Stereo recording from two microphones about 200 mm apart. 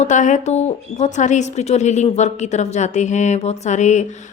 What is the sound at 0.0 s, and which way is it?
A woman's voice, 40° left (ahead or behind).